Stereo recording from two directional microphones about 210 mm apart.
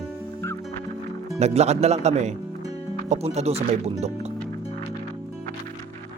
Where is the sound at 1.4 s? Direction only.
30° right (ahead or behind).